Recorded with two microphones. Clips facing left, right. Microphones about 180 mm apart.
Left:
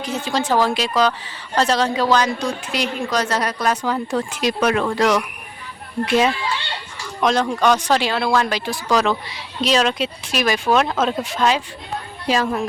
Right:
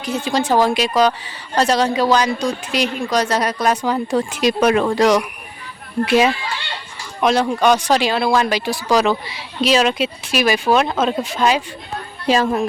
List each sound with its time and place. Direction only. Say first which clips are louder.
0.0 s a woman's voice: right 3 dB; 10° right (ahead or behind)
7.2 s a woman's voice: right 2 dB; 10° right (ahead or behind)
12.3 s speech: right 3 dB; 25° right (ahead or behind)